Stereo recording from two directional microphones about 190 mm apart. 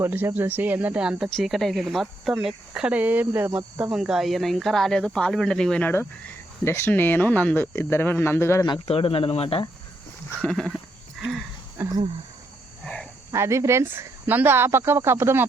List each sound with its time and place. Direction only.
0.0 s speech: 10° right (ahead or behind); by 9.6 s 30° left (ahead or behind)
10.4 s speech: 5° left (ahead or behind)
11.8 s speech: 10° right (ahead or behind)
12.8 s a sound: 5° left (ahead or behind)
13.3 s speech: 15° right (ahead or behind)